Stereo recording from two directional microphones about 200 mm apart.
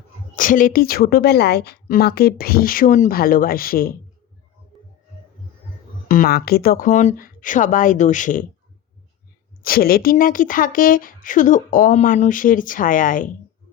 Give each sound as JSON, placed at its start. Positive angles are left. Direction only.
{"t": 0.3, "sound": "a woman's voice", "side_deg": 40}
{"t": 6.1, "sound": "a woman's voice", "side_deg": 45}
{"t": 9.6, "sound": "a woman's voice", "side_deg": 45}